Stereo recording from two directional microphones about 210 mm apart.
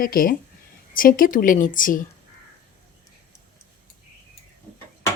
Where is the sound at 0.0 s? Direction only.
40° left (ahead or behind).